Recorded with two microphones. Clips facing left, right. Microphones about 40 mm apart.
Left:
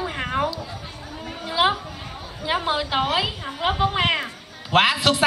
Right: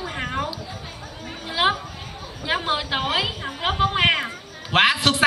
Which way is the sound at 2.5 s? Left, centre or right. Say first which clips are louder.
Even; centre.